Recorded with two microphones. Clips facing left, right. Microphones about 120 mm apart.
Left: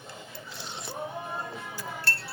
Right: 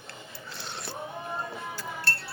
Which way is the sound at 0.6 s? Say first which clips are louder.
Right 1 dB; 70° right (ahead or behind).